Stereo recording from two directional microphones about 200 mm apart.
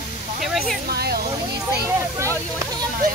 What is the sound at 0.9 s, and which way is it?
Speech, 50° right (ahead or behind).